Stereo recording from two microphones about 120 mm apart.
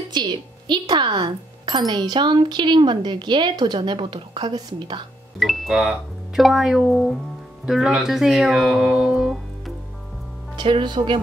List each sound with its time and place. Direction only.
0.1 s speech: 40° right (ahead or behind)
5.4 s speech: centre (ahead or behind)
10.5 s speech: 40° right (ahead or behind)